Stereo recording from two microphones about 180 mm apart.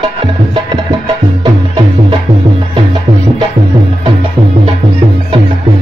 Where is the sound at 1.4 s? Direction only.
25° right (ahead or behind).